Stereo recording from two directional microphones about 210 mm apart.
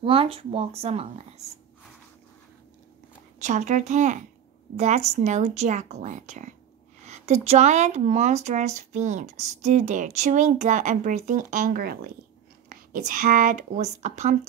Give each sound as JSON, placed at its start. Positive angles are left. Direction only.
{"t": 0.0, "sound": "speech", "side_deg": -25}
{"t": 3.3, "sound": "speech", "side_deg": -35}